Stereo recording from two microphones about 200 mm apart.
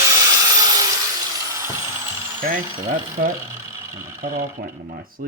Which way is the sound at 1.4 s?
15° right (ahead or behind).